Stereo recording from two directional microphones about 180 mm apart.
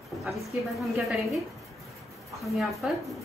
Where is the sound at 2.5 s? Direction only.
Centre (ahead or behind).